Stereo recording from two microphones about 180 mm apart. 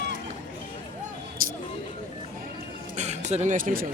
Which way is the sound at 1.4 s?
50° right (ahead or behind).